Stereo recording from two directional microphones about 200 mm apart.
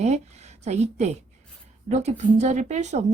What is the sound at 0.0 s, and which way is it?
A woman's voice, 35° right (ahead or behind).